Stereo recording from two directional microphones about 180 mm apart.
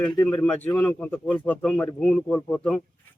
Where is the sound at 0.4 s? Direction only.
10° left (ahead or behind).